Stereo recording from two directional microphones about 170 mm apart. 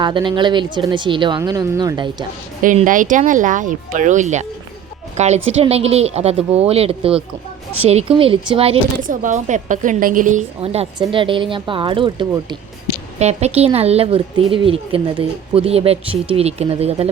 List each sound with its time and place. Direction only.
0.0 s speech: 30° right (ahead or behind)
2.6 s speech: 50° right (ahead or behind); by 8.8 s 35° right (ahead or behind)
9.0 s speech: 50° right (ahead or behind)
10.6 s speech: 35° right (ahead or behind)
13.1 s speech: 40° right (ahead or behind)